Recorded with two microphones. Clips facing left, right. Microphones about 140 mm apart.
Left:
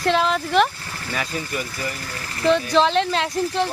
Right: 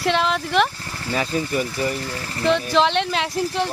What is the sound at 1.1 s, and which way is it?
Speech, 30° right (ahead or behind).